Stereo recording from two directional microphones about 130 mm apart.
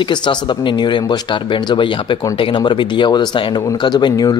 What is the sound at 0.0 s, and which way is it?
Speech, 35° left (ahead or behind).